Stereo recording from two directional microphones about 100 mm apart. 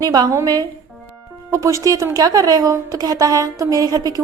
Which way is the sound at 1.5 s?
30° right (ahead or behind).